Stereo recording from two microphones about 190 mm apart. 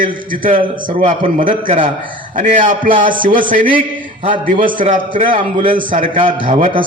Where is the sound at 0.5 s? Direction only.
25° right (ahead or behind).